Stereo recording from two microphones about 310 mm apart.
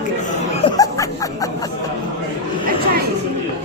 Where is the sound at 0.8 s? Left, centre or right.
Centre.